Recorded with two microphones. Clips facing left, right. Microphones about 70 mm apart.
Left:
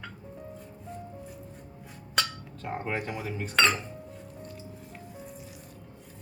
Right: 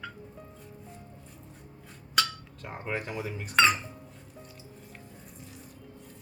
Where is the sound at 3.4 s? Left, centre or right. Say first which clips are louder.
Right 1 dB; centre.